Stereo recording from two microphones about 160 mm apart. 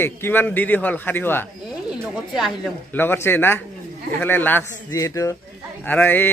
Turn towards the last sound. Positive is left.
turn(degrees=10)  # may be behind; listen again after turning